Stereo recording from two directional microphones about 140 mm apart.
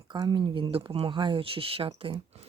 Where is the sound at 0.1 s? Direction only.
35° right (ahead or behind).